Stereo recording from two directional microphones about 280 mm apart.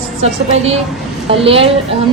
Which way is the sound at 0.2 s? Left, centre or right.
Right.